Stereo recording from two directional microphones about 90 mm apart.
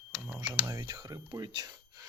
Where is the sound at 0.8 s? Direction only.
50° right (ahead or behind).